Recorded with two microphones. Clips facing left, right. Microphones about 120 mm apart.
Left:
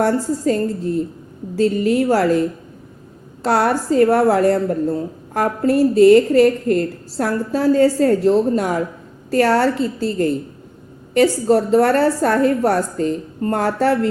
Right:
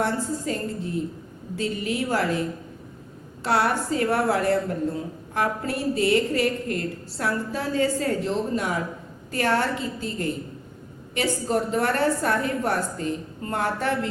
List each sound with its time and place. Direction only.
0.0 s a woman's voice: 40° left (ahead or behind)
3.4 s a woman's voice: 40° left (ahead or behind)